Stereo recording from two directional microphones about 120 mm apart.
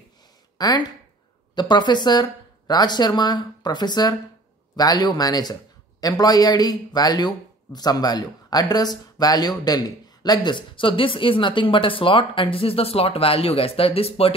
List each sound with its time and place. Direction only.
0.6 s speech: 35° left (ahead or behind); by 14.3 s 55° left (ahead or behind)